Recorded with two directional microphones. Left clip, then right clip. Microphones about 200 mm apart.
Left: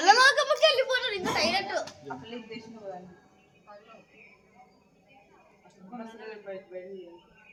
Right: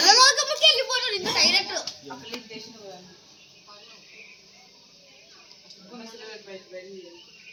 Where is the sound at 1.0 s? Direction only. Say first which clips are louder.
Right 5 dB; 10° left (ahead or behind).